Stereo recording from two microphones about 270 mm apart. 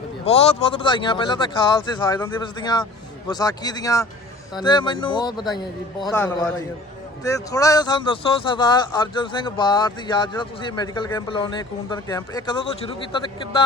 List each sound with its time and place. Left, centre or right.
0.3 s speech: left